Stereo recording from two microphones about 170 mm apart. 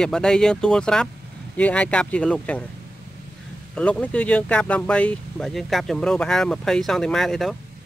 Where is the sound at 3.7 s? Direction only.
5° left (ahead or behind).